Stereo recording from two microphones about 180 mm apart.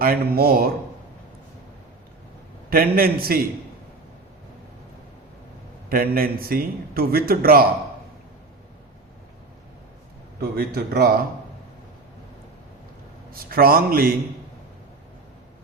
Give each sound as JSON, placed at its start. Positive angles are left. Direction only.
{"t": 0.0, "sound": "a man's voice", "side_deg": -55}
{"t": 2.6, "sound": "a man's voice", "side_deg": -55}
{"t": 5.9, "sound": "a man's voice", "side_deg": -55}
{"t": 10.4, "sound": "a man's voice", "side_deg": -60}
{"t": 13.3, "sound": "a man's voice", "side_deg": -55}